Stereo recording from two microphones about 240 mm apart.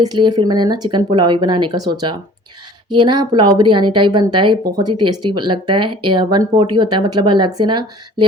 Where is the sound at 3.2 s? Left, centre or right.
Centre.